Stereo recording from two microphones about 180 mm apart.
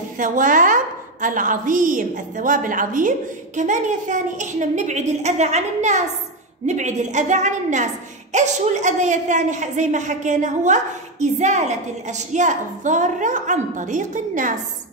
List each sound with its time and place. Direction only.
0.2 s a woman's voice: 45° right (ahead or behind)